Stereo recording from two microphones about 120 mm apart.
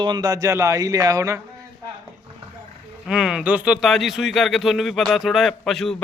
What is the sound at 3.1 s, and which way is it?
Speech, 5° right (ahead or behind).